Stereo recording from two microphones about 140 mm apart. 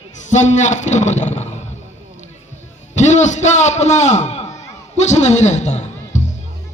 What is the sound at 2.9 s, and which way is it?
A man's voice, 60° left (ahead or behind).